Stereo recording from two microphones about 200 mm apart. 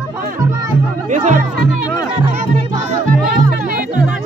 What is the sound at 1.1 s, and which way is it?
Music, 40° right (ahead or behind).